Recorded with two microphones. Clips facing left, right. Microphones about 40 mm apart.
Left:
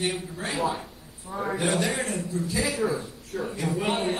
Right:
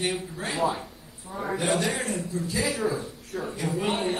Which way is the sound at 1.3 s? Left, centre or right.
Centre.